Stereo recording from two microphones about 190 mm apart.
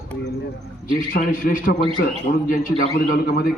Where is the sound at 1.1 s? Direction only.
45° left (ahead or behind).